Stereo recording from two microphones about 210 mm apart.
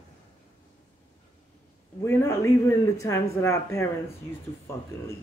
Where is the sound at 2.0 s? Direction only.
10° left (ahead or behind).